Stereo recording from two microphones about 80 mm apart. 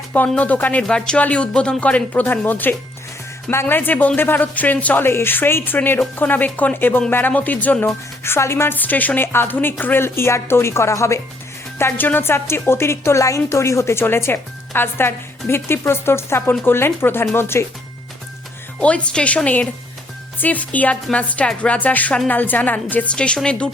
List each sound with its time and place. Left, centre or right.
0.3 s a woman's voice: left
8.2 s a woman's voice: left
11.8 s a woman's voice: left
18.8 s a woman's voice: centre
20.4 s a woman's voice: centre